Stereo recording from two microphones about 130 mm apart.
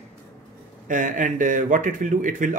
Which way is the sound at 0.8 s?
75° right (ahead or behind).